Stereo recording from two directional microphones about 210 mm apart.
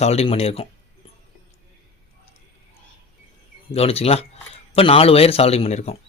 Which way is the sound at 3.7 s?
30° left (ahead or behind).